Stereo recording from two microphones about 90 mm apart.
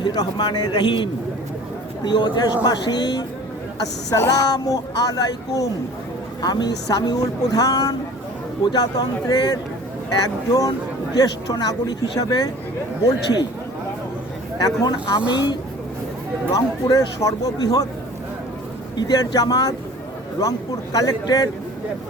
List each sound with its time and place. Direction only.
0.0 s a man's voice: 50° left (ahead or behind)
4.1 s a man's voice: 35° left (ahead or behind)
14.6 s a man's voice: 45° left (ahead or behind)
16.5 s a man's voice: 40° left (ahead or behind)
18.9 s a man's voice: 45° left (ahead or behind)